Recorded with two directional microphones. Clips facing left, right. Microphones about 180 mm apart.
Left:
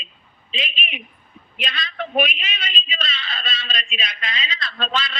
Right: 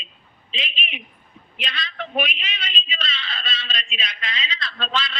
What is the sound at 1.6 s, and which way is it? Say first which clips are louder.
A man's voice: left 3 dB; 45° left (ahead or behind).